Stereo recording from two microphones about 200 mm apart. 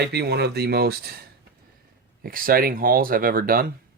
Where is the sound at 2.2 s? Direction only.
45° right (ahead or behind).